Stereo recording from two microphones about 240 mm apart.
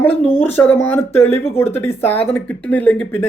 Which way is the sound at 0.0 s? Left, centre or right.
Centre.